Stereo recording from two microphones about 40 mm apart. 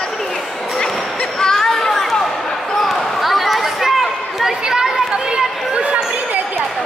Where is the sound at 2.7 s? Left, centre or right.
Centre.